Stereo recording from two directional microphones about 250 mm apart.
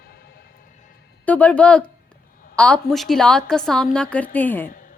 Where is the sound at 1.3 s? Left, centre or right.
Centre.